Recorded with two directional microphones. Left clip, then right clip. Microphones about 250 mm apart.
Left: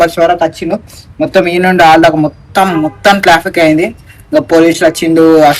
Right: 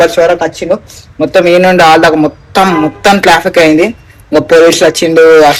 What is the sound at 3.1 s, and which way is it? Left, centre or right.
Speech, centre.